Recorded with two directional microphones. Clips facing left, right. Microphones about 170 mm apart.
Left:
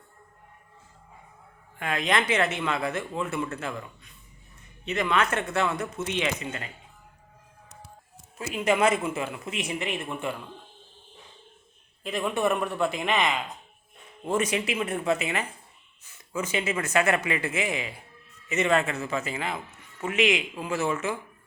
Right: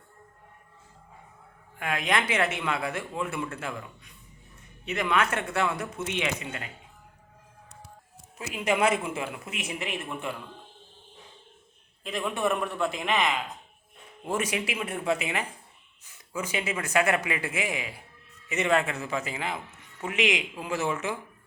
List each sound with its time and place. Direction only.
1.8 s a man's voice: 10° right (ahead or behind)
8.4 s a man's voice: 15° right (ahead or behind)
12.0 s a man's voice: centre (ahead or behind); by 21.2 s 15° right (ahead or behind)